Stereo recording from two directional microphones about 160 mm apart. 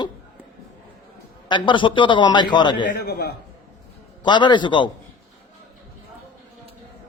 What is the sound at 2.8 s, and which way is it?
Speech, 75° left (ahead or behind).